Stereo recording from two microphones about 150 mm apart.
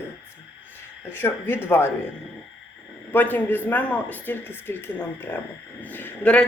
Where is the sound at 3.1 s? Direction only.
10° left (ahead or behind).